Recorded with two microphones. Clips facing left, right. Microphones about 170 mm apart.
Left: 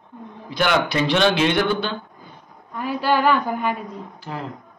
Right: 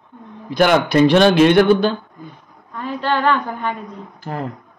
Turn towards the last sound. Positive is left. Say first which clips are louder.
# right 4 dB
turn(degrees=-50)  # may be behind; listen again after turning